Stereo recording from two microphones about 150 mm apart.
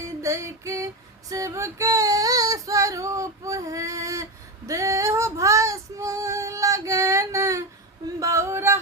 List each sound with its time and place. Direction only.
0.2 s female singing: 20° right (ahead or behind)